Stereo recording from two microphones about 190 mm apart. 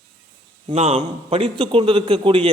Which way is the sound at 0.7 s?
35° right (ahead or behind).